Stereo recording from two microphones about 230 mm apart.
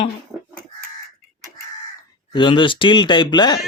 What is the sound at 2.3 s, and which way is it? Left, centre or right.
Speech, left.